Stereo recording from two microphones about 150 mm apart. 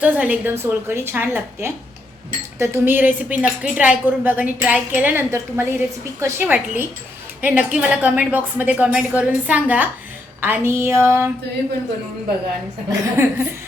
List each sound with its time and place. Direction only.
0.0 s a woman's voice: 10° right (ahead or behind)
12.9 s a woman's voice: 15° right (ahead or behind)